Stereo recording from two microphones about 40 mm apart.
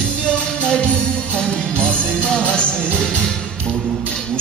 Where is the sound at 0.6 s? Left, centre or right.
Left.